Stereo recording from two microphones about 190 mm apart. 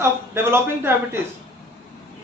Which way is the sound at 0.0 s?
15° right (ahead or behind).